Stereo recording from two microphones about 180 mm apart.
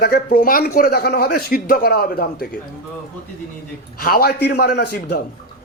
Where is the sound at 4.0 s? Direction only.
60° left (ahead or behind).